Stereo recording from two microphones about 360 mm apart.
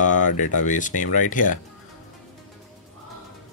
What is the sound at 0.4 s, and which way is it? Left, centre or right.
Speech, left.